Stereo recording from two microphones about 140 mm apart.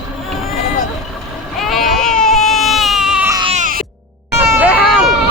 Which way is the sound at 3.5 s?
70° right (ahead or behind).